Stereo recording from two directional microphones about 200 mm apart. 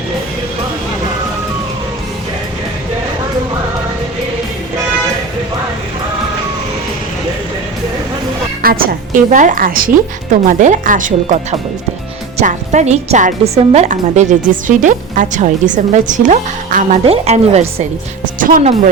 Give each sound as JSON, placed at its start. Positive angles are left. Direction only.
{"t": 8.6, "sound": "a woman's voice", "side_deg": -45}
{"t": 12.4, "sound": "a woman's voice", "side_deg": -35}
{"t": 18.3, "sound": "speech", "side_deg": -40}